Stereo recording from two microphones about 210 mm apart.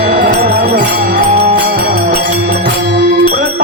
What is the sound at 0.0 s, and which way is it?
Music, 45° right (ahead or behind).